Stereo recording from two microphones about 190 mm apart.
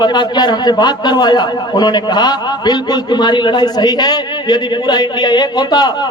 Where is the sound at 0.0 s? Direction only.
20° left (ahead or behind).